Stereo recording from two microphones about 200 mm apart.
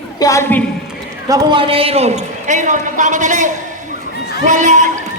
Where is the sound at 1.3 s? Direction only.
25° right (ahead or behind).